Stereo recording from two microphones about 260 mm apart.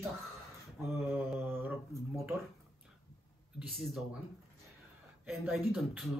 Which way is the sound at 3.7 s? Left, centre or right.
Centre.